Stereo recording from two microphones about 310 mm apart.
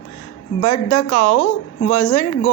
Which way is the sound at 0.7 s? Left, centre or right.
Left.